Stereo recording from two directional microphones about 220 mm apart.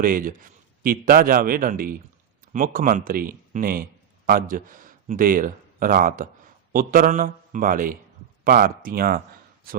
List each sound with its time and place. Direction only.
0.0 s a man's voice: 40° right (ahead or behind)